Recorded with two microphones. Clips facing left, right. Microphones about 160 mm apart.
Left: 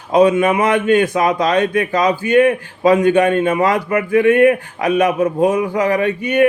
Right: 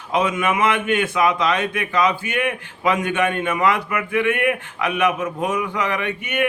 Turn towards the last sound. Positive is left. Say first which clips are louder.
# left 9 dB
turn(degrees=35)  # may be behind; listen again after turning